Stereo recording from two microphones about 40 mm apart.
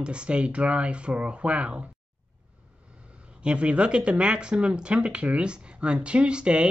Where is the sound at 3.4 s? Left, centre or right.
Right.